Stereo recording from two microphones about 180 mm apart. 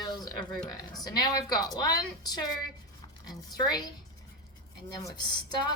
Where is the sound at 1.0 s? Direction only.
20° left (ahead or behind).